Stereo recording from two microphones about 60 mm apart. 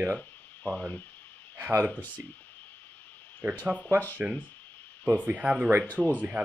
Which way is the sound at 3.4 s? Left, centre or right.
Right.